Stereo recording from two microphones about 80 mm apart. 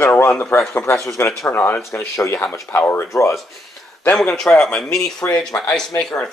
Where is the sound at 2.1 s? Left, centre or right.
Left.